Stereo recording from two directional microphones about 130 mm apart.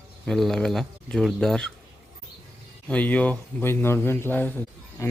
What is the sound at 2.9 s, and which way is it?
A man's voice, 10° left (ahead or behind).